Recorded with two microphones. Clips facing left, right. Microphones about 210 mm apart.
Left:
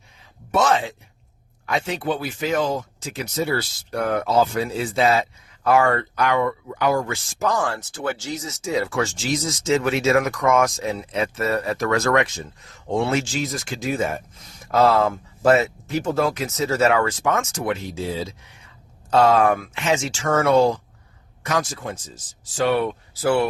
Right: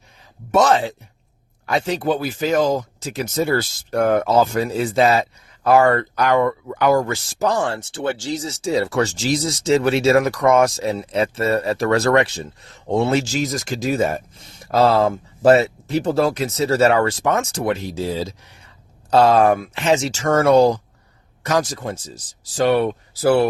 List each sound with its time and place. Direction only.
0.5 s speech: 40° right (ahead or behind)
6.7 s speech: 55° right (ahead or behind)
7.1 s speech: 35° right (ahead or behind)